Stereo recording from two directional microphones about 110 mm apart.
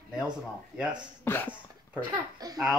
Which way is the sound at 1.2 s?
20° left (ahead or behind).